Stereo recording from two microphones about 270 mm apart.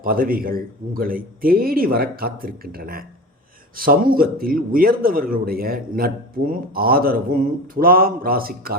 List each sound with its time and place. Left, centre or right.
0.0 s a man's voice: right